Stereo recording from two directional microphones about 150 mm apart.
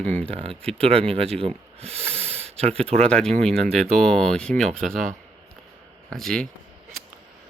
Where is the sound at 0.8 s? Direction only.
40° right (ahead or behind).